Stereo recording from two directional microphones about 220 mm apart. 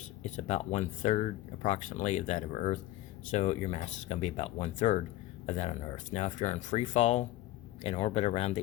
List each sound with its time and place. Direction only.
0.2 s speech: 30° left (ahead or behind)